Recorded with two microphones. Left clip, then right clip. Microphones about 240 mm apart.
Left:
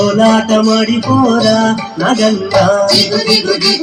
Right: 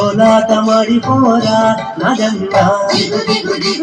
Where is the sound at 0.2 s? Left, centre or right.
Left.